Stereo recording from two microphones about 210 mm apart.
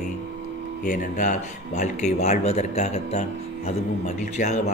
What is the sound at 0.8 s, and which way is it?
Speech, 35° left (ahead or behind).